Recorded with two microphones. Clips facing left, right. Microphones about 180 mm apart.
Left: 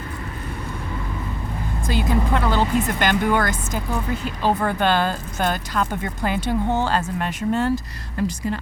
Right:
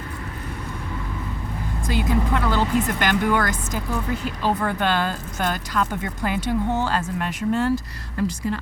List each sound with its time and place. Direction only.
1.9 s speech: 30° left (ahead or behind)